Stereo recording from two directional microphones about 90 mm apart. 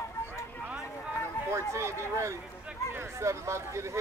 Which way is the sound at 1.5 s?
30° right (ahead or behind).